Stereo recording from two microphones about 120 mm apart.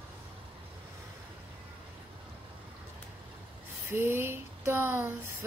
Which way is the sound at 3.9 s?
20° right (ahead or behind).